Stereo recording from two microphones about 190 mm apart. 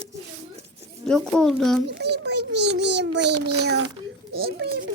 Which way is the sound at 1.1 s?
5° left (ahead or behind).